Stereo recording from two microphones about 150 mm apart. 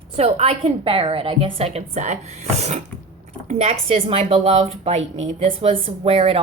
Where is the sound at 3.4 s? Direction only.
45° right (ahead or behind).